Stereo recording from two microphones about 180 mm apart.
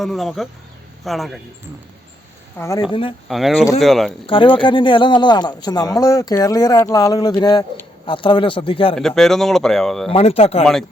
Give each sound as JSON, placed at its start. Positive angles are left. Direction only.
{"t": 0.0, "sound": "speech", "side_deg": 0}
{"t": 2.6, "sound": "speech", "side_deg": 15}
{"t": 2.9, "sound": "speech", "side_deg": 30}
{"t": 3.2, "sound": "speech", "side_deg": 0}
{"t": 4.3, "sound": "speech", "side_deg": 30}
{"t": 9.0, "sound": "speech", "side_deg": 0}
{"t": 10.1, "sound": "speech", "side_deg": 35}